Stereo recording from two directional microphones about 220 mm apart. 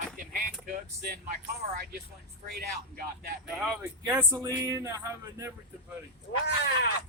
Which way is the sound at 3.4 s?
5° right (ahead or behind).